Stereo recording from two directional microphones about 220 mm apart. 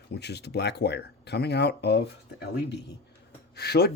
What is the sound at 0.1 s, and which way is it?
Speech, 50° left (ahead or behind).